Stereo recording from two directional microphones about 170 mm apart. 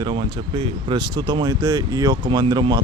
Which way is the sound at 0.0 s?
30° right (ahead or behind).